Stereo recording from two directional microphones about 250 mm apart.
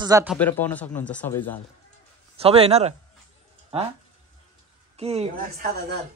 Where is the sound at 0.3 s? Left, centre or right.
Centre.